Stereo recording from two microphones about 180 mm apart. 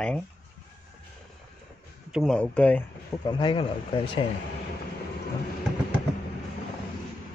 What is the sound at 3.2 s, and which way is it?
Speech, 25° left (ahead or behind).